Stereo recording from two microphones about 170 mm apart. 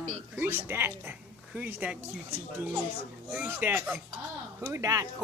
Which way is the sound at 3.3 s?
10° right (ahead or behind).